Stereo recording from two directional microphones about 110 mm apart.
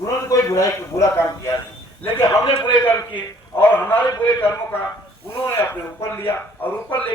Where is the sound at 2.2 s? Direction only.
45° left (ahead or behind).